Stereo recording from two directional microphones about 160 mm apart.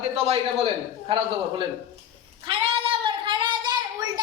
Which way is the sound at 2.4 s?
35° right (ahead or behind).